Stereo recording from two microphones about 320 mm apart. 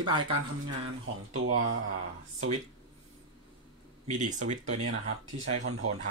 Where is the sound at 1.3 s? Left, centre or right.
Right.